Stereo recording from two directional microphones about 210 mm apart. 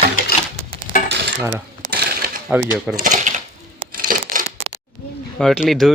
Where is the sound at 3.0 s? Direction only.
35° right (ahead or behind).